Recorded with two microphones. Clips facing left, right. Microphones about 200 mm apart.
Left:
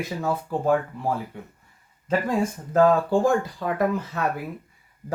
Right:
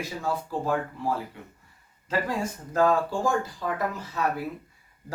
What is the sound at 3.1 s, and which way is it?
Speech, 60° left (ahead or behind).